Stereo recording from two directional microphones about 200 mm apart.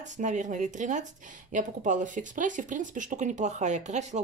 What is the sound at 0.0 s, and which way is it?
Speech, 35° right (ahead or behind).